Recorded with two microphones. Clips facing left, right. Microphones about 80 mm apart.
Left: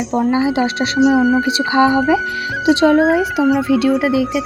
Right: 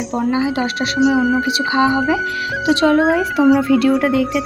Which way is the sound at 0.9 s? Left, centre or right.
Centre.